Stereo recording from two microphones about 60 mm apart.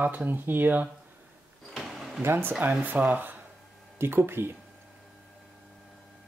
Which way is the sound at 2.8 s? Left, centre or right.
Right.